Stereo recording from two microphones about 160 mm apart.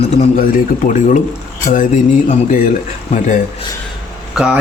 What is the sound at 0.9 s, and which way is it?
Speech, 50° left (ahead or behind).